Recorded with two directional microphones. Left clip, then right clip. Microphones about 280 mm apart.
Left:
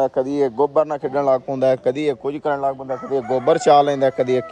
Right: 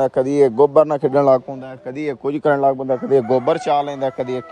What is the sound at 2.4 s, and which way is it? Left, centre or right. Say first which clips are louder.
Speech: right 5 dB; right.